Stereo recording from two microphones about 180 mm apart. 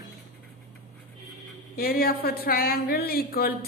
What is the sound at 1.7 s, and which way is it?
A woman's voice, 55° left (ahead or behind).